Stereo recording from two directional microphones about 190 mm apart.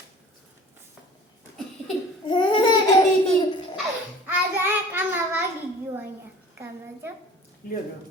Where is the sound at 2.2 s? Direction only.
25° left (ahead or behind).